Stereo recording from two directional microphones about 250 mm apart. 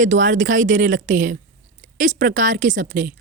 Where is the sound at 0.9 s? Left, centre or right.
Right.